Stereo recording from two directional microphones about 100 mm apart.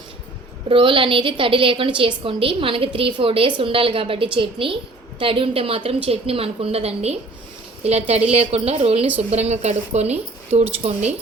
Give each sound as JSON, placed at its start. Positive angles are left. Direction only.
{"t": 0.7, "sound": "a woman's voice", "side_deg": -60}